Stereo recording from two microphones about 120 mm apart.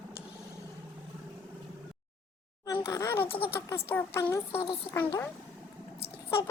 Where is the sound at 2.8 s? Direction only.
25° left (ahead or behind).